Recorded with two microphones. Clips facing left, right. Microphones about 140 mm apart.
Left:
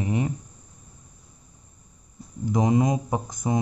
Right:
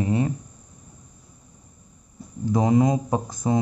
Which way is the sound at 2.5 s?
20° left (ahead or behind).